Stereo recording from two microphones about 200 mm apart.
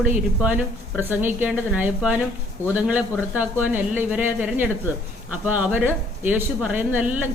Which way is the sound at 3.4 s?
10° right (ahead or behind).